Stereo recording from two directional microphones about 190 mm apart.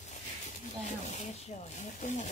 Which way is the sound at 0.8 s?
40° left (ahead or behind).